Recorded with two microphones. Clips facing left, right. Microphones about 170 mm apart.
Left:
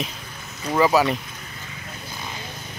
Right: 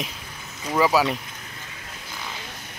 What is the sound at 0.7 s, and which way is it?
Speech, 5° right (ahead or behind).